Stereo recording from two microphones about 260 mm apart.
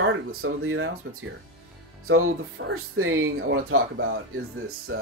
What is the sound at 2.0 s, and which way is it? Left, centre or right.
Speech, right.